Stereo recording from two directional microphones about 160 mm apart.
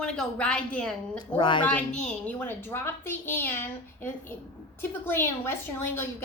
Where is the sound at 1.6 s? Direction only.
5° left (ahead or behind).